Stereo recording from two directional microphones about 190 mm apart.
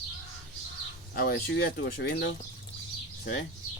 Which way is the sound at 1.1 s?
55° left (ahead or behind).